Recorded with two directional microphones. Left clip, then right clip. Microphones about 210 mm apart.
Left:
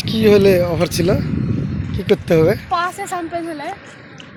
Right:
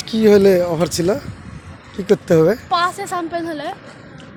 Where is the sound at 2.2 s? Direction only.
5° right (ahead or behind).